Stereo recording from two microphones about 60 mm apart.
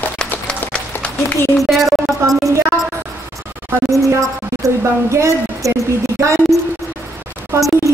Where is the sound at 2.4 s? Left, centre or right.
Right.